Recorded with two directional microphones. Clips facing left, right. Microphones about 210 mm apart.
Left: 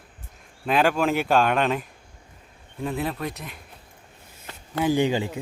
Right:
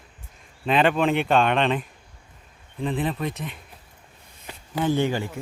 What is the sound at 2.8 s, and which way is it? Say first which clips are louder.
Speech: right 2 dB; centre (ahead or behind).